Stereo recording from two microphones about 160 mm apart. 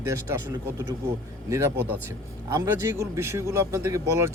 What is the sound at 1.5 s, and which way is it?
Speech, 15° right (ahead or behind).